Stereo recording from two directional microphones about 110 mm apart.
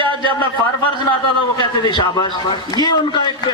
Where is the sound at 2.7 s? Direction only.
40° left (ahead or behind).